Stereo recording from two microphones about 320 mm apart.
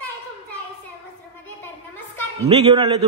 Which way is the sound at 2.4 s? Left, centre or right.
Centre.